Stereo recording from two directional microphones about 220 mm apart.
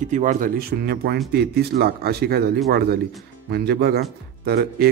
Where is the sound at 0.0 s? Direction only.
35° right (ahead or behind).